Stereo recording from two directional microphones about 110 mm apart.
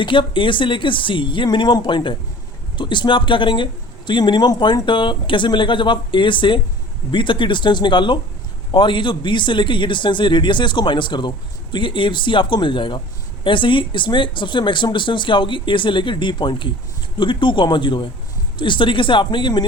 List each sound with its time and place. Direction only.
0.0 s a man's voice: 50° left (ahead or behind)